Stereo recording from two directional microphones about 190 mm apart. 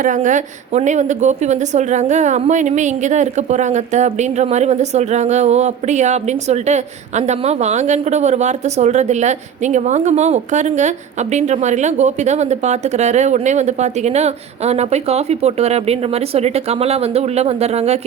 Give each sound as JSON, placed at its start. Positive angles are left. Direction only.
{"t": 0.0, "sound": "a woman's voice", "side_deg": -40}